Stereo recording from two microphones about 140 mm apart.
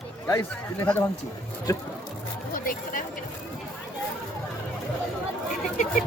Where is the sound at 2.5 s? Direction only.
80° left.